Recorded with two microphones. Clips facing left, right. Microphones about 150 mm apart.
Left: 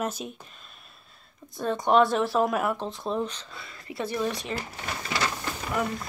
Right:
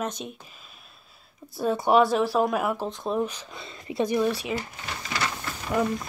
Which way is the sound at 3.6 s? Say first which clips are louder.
Right 6 dB; 20° right (ahead or behind).